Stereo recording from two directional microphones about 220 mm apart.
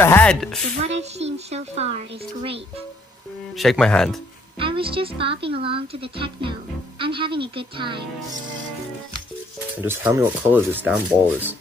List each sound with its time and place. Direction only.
0.0 s speech: 10° left (ahead or behind)
0.7 s a sound: 30° right (ahead or behind)
3.5 s speech: centre (ahead or behind)
4.6 s speech: 25° right (ahead or behind)
9.8 s speech: 10° right (ahead or behind)